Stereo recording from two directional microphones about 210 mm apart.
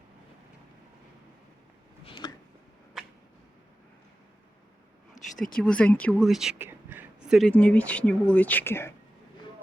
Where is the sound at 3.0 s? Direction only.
Centre (ahead or behind).